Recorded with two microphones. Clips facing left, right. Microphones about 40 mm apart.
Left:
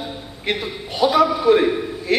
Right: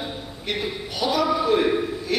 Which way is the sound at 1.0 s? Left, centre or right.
Left.